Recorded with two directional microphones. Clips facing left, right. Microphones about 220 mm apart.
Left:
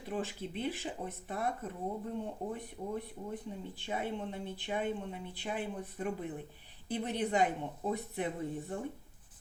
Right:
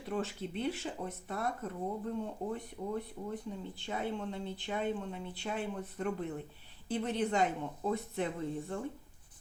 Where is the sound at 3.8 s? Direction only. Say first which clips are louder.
Even; 15° left (ahead or behind).